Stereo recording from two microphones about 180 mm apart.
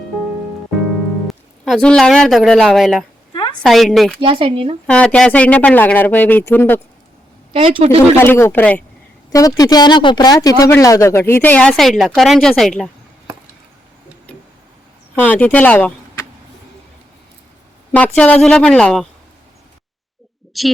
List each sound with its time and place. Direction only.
1.3 s speech: centre (ahead or behind)
4.2 s speech: 30° right (ahead or behind)
4.9 s speech: 5° left (ahead or behind)
7.5 s speech: 30° right (ahead or behind)
7.9 s speech: 15° left (ahead or behind)
11.7 s speech: centre (ahead or behind)
15.1 s speech: 10° left (ahead or behind)
17.9 s speech: 10° left (ahead or behind)
20.5 s speech: centre (ahead or behind)